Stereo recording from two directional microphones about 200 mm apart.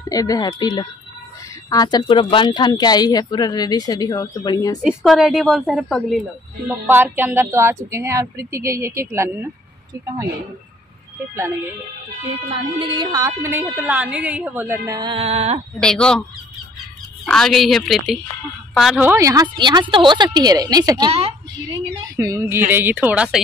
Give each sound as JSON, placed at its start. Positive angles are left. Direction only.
{"t": 0.1, "sound": "speech", "side_deg": 20}
{"t": 4.8, "sound": "a woman's voice", "side_deg": 0}
{"t": 6.9, "sound": "a woman's voice", "side_deg": -10}
{"t": 12.4, "sound": "a woman's voice", "side_deg": -25}
{"t": 15.8, "sound": "a woman's voice", "side_deg": 5}
{"t": 22.1, "sound": "a woman's voice", "side_deg": -15}